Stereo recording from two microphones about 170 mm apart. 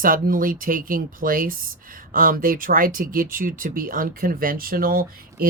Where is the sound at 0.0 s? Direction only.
55° right (ahead or behind).